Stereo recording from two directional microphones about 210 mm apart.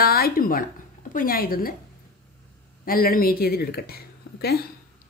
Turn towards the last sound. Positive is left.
turn(degrees=50)  # may be behind; listen again after turning